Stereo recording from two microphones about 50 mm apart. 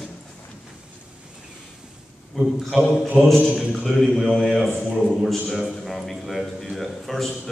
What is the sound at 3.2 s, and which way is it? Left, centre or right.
A man's voice, centre.